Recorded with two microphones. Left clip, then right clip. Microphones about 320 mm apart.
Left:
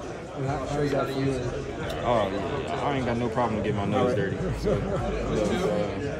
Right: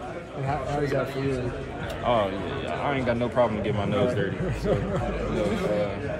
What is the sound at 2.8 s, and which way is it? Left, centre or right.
Speech, centre.